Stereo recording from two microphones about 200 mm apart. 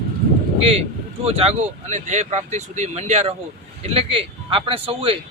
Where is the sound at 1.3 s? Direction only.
30° right (ahead or behind).